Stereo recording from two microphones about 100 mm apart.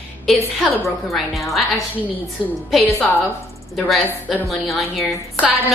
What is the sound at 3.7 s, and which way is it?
A woman's voice, centre (ahead or behind).